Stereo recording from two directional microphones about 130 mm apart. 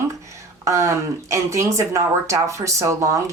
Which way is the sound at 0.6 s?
25° right (ahead or behind).